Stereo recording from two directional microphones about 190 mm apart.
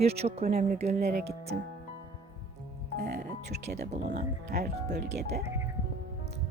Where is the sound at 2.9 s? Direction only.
55° right (ahead or behind).